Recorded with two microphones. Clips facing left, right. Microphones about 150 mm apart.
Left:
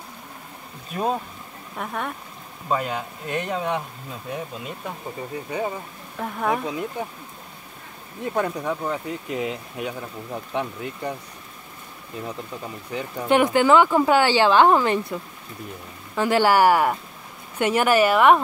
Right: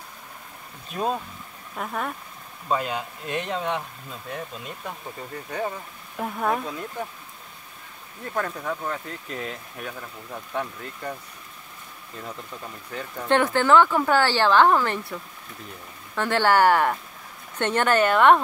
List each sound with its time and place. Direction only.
0.9 s speech: 5° left (ahead or behind)
6.1 s speech: centre (ahead or behind)
6.6 s speech: 10° left (ahead or behind)
8.3 s speech: 15° left (ahead or behind)
12.2 s speech: 15° left (ahead or behind)
16.2 s speech: 10° left (ahead or behind)